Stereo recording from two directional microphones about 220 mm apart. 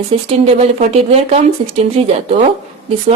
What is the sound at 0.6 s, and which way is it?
Speech, 30° right (ahead or behind).